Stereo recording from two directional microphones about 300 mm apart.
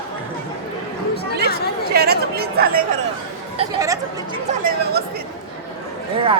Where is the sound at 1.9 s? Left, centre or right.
Right.